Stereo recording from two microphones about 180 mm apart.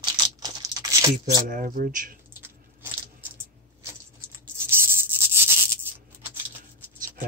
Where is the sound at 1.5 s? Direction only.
50° right (ahead or behind).